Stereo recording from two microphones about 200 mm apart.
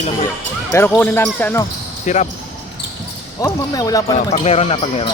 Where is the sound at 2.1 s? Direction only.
35° left (ahead or behind).